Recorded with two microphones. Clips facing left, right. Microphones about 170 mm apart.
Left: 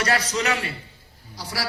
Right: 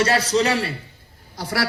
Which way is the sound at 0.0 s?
30° right (ahead or behind).